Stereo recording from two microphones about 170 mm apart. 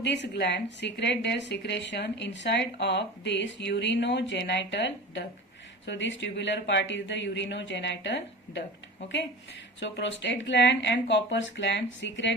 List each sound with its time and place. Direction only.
0.0 s speech: 90° left
9.8 s speech: 90° left